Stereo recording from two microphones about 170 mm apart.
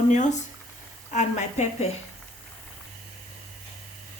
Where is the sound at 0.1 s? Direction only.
45° left (ahead or behind).